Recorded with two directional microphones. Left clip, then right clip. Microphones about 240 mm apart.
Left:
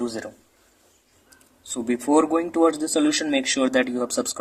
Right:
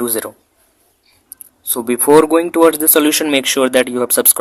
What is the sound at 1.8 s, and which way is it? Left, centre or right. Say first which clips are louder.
A man's voice: right 10 dB; right.